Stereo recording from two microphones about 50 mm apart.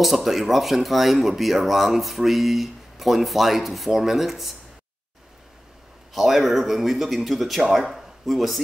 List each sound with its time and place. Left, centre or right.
0.0 s speech: centre
6.1 s speech: centre